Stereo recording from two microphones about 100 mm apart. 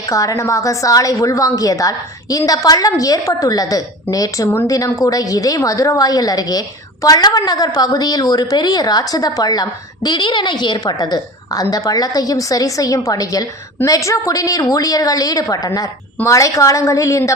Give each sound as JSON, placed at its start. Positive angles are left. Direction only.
{"t": 0.1, "sound": "a woman's voice", "side_deg": 30}